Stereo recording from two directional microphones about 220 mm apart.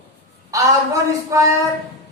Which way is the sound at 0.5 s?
15° right (ahead or behind).